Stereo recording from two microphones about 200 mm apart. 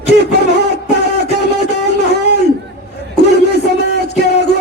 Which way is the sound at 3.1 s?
55° left (ahead or behind).